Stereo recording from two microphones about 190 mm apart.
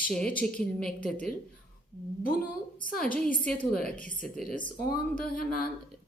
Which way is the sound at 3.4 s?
5° left (ahead or behind).